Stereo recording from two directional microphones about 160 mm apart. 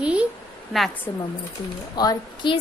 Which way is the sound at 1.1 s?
20° left (ahead or behind).